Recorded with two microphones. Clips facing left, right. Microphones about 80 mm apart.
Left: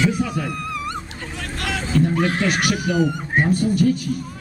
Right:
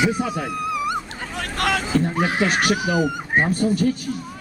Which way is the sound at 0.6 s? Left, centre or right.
Centre.